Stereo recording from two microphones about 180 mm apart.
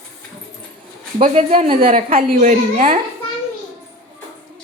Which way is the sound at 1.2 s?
35° right (ahead or behind).